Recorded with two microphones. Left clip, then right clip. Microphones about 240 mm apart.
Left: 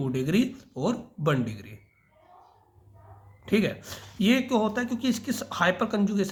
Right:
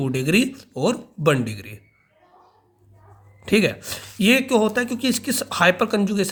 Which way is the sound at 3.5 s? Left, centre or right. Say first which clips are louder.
Right 7 dB; right.